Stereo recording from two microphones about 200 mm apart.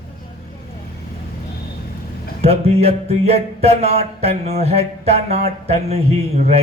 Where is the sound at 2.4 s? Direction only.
30° right (ahead or behind).